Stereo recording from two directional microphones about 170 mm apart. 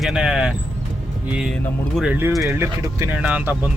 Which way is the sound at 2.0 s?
10° right (ahead or behind).